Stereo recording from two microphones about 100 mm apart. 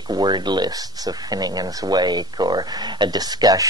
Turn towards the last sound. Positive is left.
turn(degrees=-40)  # may be behind; listen again after turning